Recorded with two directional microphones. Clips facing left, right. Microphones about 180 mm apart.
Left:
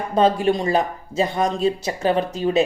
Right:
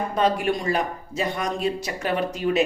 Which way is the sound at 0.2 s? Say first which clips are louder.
Left 5 dB; 30° left (ahead or behind).